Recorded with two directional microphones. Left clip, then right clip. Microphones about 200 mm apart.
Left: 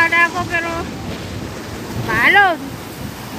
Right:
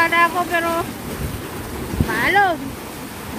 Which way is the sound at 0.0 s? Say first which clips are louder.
Left 2 dB; 20° right (ahead or behind).